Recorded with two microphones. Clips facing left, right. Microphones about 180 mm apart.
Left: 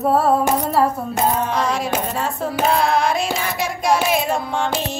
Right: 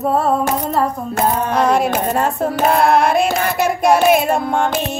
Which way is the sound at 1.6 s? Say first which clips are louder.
Right 6 dB; 55° right (ahead or behind).